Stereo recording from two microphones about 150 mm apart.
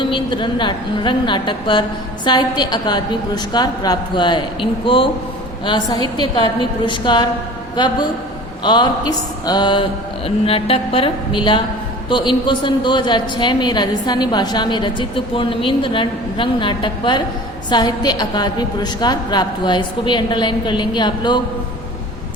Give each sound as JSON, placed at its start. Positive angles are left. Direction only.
{"t": 0.0, "sound": "a woman's voice", "side_deg": 30}